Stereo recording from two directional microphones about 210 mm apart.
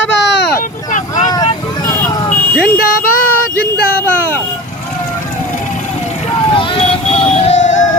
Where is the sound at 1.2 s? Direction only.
20° left (ahead or behind).